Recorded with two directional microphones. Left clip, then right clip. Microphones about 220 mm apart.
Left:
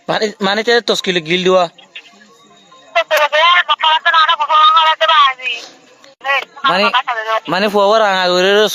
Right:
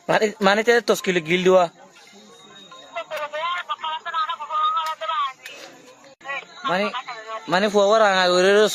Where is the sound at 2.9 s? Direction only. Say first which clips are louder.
Left 17 dB; 45° left (ahead or behind).